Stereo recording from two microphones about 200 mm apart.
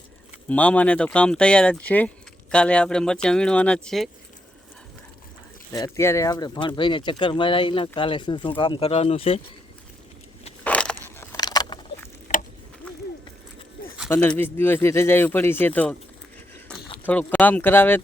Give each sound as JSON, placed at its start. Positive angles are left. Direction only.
{"t": 0.4, "sound": "speech", "side_deg": 5}
{"t": 5.7, "sound": "speech", "side_deg": 15}
{"t": 10.6, "sound": "a sound", "side_deg": 5}
{"t": 12.3, "sound": "a sound", "side_deg": 35}
{"t": 12.8, "sound": "run", "side_deg": 5}
{"t": 14.1, "sound": "speech", "side_deg": 10}
{"t": 17.1, "sound": "speech", "side_deg": 5}